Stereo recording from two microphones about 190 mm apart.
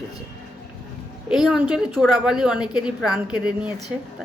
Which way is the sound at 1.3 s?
5° right (ahead or behind).